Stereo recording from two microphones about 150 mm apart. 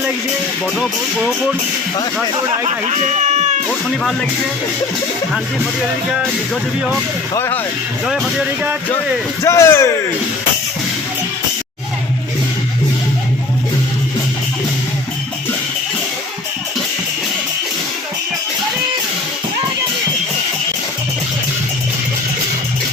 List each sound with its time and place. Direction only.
2.6 s speech: 50° right (ahead or behind)
7.3 s speech: 15° left (ahead or behind)
8.0 s speech: centre (ahead or behind)
9.4 s speech: 20° left (ahead or behind)